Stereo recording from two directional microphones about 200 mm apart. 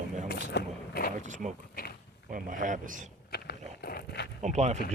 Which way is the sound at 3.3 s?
50° left (ahead or behind).